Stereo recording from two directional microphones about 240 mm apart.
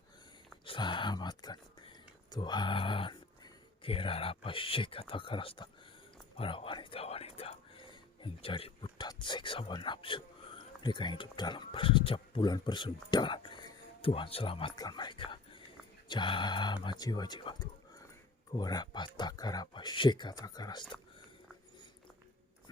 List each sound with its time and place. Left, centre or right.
0.6 s speech: left